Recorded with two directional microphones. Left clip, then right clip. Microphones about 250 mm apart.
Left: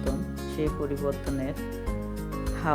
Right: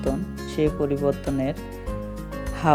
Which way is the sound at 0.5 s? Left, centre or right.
Centre.